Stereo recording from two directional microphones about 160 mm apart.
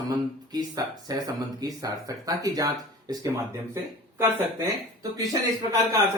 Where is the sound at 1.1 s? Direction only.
25° right (ahead or behind).